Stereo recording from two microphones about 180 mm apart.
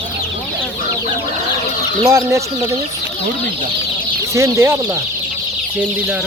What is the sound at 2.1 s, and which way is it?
Speech, 15° right (ahead or behind).